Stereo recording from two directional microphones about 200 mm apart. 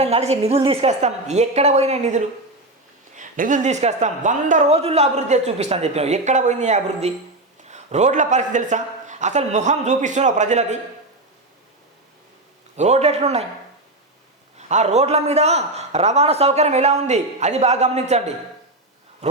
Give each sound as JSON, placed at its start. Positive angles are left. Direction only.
{"t": 0.0, "sound": "a man's voice", "side_deg": -30}
{"t": 12.7, "sound": "a man's voice", "side_deg": -35}
{"t": 14.7, "sound": "a man's voice", "side_deg": -35}
{"t": 19.2, "sound": "a sound", "side_deg": -35}